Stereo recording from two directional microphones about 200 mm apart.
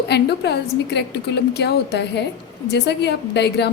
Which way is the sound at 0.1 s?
55° left (ahead or behind).